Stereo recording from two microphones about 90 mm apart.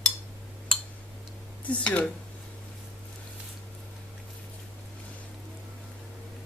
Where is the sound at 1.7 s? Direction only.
15° left (ahead or behind).